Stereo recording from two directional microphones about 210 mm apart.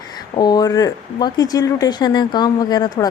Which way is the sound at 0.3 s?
20° left (ahead or behind).